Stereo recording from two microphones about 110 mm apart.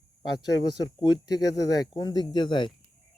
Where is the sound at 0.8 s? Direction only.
40° left (ahead or behind).